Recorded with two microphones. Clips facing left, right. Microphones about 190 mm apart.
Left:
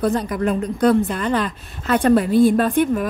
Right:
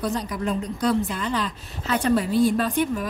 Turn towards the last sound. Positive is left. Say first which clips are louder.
# left 6 dB
turn(degrees=55)  # may be behind; listen again after turning